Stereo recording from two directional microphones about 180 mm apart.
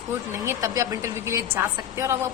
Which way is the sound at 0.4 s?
20° right (ahead or behind).